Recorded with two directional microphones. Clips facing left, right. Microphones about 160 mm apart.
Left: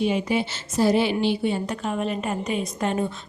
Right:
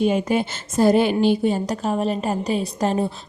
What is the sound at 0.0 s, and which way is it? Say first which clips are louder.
A woman's voice: right 3 dB; 45° right (ahead or behind).